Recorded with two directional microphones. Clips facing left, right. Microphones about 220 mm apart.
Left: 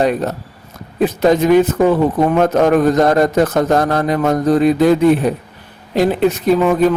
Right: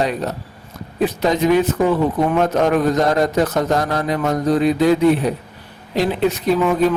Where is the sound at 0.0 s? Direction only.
50° left (ahead or behind).